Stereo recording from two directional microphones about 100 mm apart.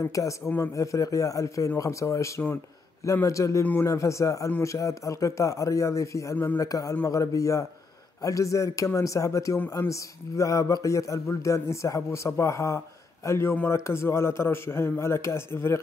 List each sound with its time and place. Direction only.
0.0 s a man's voice: 30° left (ahead or behind)
6.3 s a man's voice: 15° left (ahead or behind)
6.6 s a man's voice: 35° left (ahead or behind)